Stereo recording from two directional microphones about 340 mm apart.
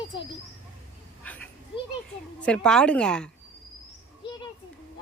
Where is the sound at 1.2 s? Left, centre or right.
Centre.